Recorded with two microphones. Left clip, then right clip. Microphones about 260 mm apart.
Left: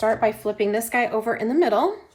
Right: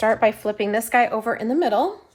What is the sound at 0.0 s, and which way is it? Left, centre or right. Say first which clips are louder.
A woman's voice: right 2 dB; right.